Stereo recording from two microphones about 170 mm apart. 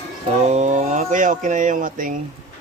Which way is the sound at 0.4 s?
45° right (ahead or behind).